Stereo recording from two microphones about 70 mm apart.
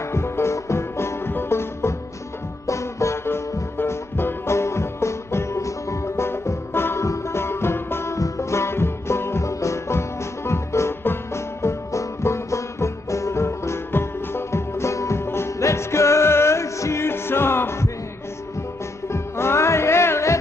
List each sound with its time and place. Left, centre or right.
0.1 s music: left
19.1 s music: left